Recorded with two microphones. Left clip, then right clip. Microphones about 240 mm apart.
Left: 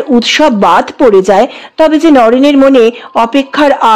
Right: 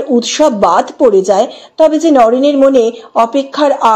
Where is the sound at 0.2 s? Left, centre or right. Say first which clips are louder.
Left 3 dB; left.